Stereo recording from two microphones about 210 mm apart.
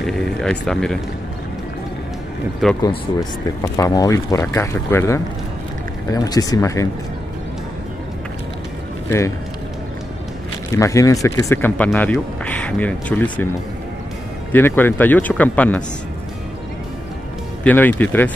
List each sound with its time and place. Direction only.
0.0 s speech: centre (ahead or behind)
2.6 s speech: centre (ahead or behind)
3.6 s speech: 15° left (ahead or behind)
10.8 s speech: 15° left (ahead or behind)
14.5 s speech: 10° left (ahead or behind)
17.6 s speech: 10° left (ahead or behind)